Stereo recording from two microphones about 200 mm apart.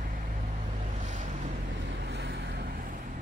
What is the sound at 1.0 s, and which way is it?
Boat, 35° right (ahead or behind).